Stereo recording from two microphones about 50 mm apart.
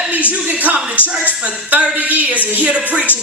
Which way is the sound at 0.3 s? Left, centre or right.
Right.